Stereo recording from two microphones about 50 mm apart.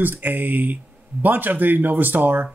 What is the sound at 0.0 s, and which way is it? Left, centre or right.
Speech, right.